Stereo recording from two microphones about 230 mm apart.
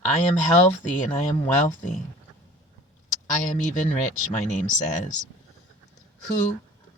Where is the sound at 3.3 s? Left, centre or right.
Left.